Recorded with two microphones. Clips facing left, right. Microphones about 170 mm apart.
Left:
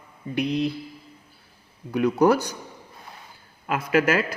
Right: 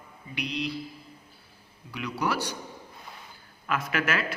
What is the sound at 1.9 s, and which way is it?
Speech, 45° left (ahead or behind).